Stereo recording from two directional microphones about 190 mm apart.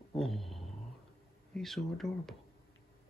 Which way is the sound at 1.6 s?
Centre (ahead or behind).